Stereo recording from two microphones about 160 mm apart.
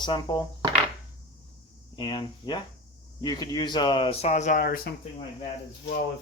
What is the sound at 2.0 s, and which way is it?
Speech, 30° left (ahead or behind).